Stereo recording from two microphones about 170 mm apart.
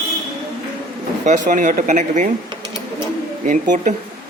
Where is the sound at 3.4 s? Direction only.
50° right (ahead or behind).